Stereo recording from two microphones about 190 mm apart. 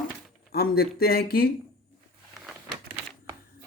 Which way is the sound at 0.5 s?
55° left (ahead or behind).